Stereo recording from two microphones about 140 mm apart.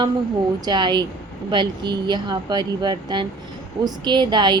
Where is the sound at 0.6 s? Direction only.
30° right (ahead or behind).